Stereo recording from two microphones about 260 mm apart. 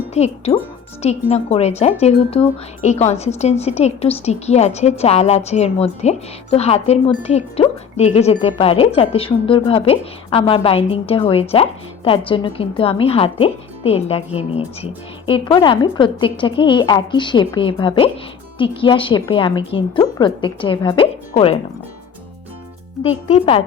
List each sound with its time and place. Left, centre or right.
0.1 s a woman's voice: left
23.0 s speech: left